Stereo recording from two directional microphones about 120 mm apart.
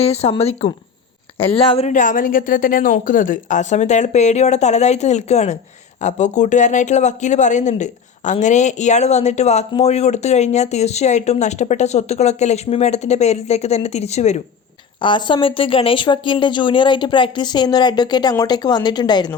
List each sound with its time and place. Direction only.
0.0 s a woman's voice: 60° left (ahead or behind)
1.9 s speech: 90° left; by 14.4 s 70° left (ahead or behind)
15.0 s speech: 40° left (ahead or behind)